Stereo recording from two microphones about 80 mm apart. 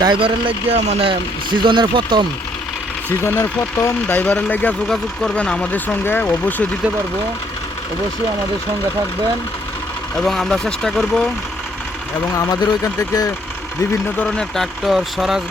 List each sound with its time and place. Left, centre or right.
0.0 s speech: right
3.2 s speech: left
4.0 s speech: left
10.2 s speech: centre
12.4 s speech: left
14.2 s speech: centre